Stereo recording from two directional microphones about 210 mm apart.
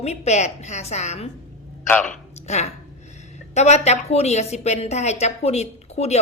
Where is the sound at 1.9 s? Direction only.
10° left (ahead or behind).